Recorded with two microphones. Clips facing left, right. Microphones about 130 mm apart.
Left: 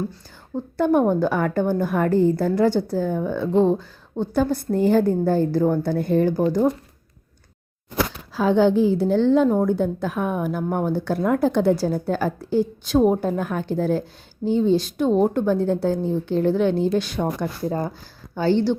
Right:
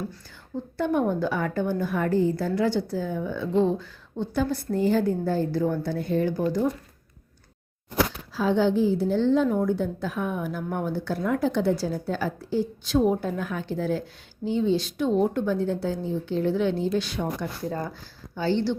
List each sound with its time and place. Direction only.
0.5 s a woman's voice: 45° left (ahead or behind)
8.3 s a woman's voice: 60° left (ahead or behind)
9.5 s a woman's voice: 50° left (ahead or behind)
17.7 s speech: 30° left (ahead or behind)
18.3 s a woman's voice: 50° left (ahead or behind)